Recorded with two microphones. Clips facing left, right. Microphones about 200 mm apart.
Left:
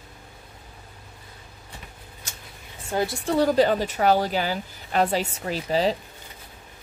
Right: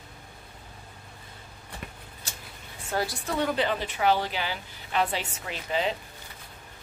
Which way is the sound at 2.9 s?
20° left (ahead or behind).